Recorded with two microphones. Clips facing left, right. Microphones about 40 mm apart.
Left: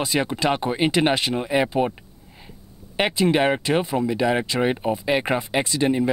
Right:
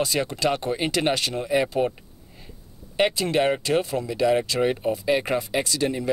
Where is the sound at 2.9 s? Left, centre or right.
Centre.